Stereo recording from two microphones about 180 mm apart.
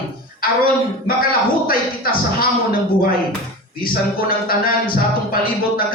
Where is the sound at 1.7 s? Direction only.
55° left (ahead or behind).